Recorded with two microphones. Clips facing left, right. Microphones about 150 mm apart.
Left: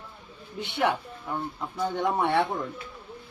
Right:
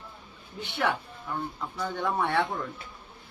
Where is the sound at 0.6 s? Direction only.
25° left (ahead or behind).